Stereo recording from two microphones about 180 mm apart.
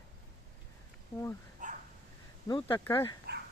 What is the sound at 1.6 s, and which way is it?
Dog, 45° right (ahead or behind).